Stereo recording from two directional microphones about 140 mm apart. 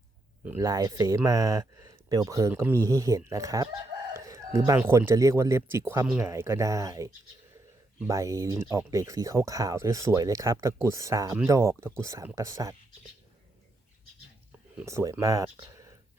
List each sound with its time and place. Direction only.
0.6 s speech: 25° right (ahead or behind)
14.8 s speech: 20° right (ahead or behind)